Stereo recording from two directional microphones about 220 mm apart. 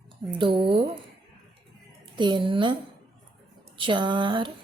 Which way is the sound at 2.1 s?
20° right (ahead or behind).